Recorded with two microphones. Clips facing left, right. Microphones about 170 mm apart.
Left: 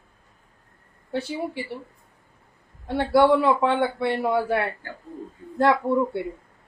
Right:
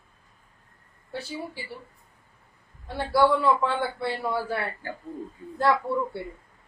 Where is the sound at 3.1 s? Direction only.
25° left (ahead or behind).